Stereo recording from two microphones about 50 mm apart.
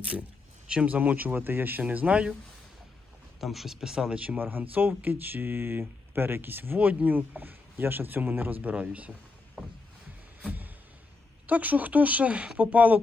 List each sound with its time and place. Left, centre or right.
0.7 s speech: right
0.9 s speech: right
1.8 s speech: right
3.4 s speech: centre
4.1 s speech: right
4.4 s speech: right
8.7 s speech: right
9.6 s speech: centre
11.4 s speech: right